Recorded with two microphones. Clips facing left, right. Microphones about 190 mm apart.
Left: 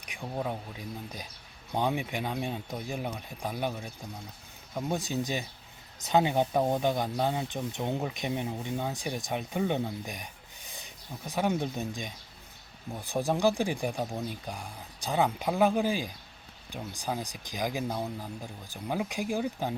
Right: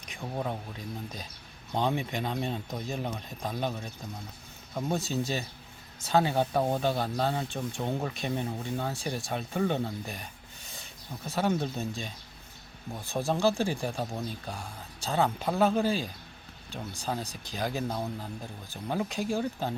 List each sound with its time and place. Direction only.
0.2 s speech: 5° left (ahead or behind)